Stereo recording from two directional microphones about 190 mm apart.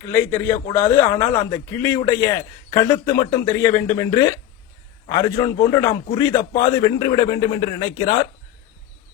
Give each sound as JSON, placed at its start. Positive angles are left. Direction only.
{"t": 0.1, "sound": "a man's voice", "side_deg": 10}